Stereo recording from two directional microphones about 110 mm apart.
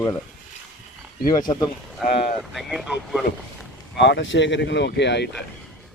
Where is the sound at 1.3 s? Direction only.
40° left (ahead or behind).